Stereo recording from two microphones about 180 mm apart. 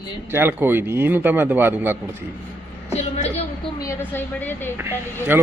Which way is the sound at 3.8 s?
15° left (ahead or behind).